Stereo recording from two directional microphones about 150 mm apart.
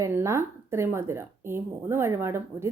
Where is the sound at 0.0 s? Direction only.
20° right (ahead or behind).